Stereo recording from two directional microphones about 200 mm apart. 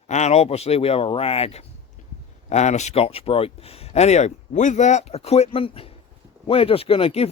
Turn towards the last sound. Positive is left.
turn(degrees=30)  # may be behind; listen again after turning